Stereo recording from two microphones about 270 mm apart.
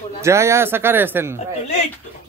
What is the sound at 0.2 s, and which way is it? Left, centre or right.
Speech, centre.